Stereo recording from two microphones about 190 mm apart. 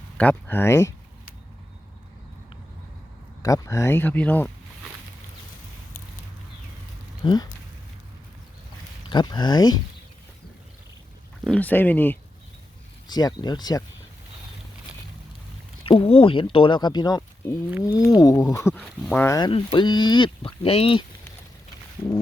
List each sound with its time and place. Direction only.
0.2 s speech: 10° left (ahead or behind)
3.4 s speech: 15° left (ahead or behind)
7.2 s speech: 25° left (ahead or behind)
9.0 s speech: 25° left (ahead or behind)
11.4 s speech: 5° left (ahead or behind)
13.1 s speech: 20° left (ahead or behind)
15.8 s speech: 30° left (ahead or behind)
18.7 s speech: 5° left (ahead or behind)
19.5 s speech: 30° left (ahead or behind)